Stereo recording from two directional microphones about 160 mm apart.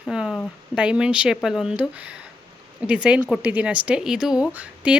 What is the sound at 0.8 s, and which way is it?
Speech, 5° right (ahead or behind).